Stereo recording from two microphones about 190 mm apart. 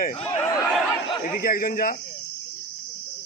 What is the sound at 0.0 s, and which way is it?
Speech, 35° left (ahead or behind).